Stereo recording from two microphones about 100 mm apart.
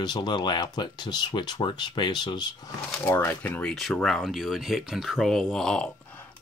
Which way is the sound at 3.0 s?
20° left (ahead or behind).